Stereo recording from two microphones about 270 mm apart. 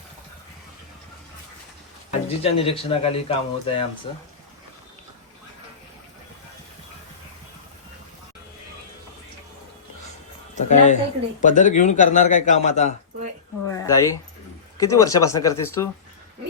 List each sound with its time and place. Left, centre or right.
2.4 s speech: left
10.5 s speech: left
13.7 s a sound: centre
14.8 s speech: centre